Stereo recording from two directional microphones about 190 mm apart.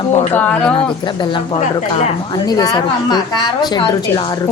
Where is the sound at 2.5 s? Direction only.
20° left (ahead or behind).